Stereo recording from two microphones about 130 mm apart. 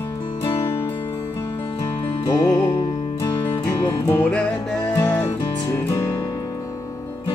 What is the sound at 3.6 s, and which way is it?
Music, 15° left (ahead or behind).